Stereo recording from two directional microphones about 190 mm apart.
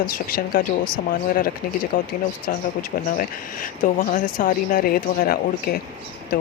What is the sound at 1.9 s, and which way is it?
Speech, 45° left (ahead or behind).